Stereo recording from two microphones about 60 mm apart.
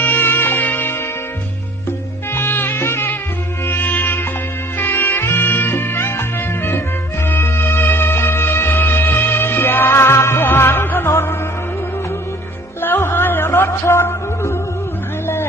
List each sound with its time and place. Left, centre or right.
0.0 s music: left
2.3 s music: left
7.3 s music: left
12.8 s music: left